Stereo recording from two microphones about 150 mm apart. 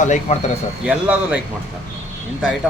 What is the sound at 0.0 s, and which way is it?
Speech, 55° left (ahead or behind).